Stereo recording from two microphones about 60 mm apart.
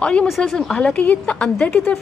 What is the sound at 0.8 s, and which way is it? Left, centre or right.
Speech, left.